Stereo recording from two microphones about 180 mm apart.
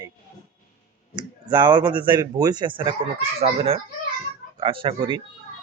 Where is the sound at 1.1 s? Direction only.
25° right (ahead or behind).